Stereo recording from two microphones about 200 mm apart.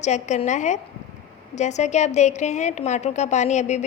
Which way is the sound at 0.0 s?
35° left (ahead or behind).